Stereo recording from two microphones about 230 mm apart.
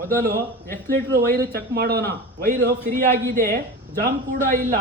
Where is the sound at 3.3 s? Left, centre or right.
Right.